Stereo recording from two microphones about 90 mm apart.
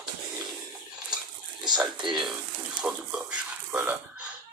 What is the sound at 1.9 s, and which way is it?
Speech, 60° right (ahead or behind).